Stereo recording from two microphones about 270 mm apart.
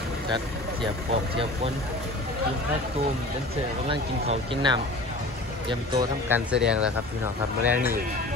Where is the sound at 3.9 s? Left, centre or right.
Centre.